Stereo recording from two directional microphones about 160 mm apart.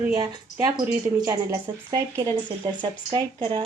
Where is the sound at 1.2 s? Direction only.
25° right (ahead or behind).